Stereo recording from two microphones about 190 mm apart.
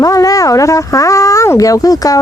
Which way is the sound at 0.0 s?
20° left (ahead or behind).